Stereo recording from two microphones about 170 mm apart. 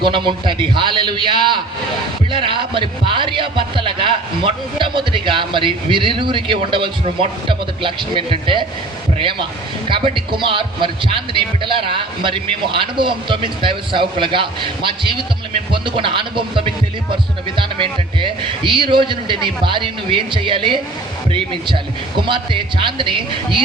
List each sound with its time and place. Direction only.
0.0 s speech: 30° right (ahead or behind)